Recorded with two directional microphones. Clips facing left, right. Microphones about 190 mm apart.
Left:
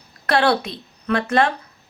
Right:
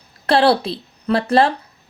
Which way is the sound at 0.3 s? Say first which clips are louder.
Right 4 dB; 30° right (ahead or behind).